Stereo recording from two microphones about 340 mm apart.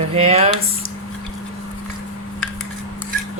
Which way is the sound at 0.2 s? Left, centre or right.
Centre.